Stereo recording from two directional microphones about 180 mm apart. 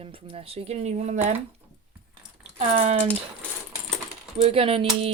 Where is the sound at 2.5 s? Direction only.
40° right (ahead or behind).